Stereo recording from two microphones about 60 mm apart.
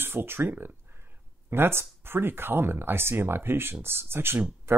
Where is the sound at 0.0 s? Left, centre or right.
Right.